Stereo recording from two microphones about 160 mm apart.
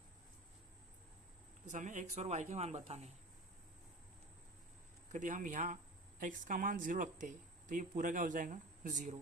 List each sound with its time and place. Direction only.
1.6 s speech: 50° right (ahead or behind)
5.1 s speech: 55° right (ahead or behind)